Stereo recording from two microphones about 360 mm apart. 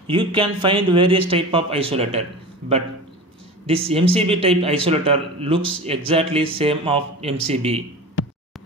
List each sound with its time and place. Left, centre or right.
0.0 s a man's voice: centre
3.6 s a man's voice: centre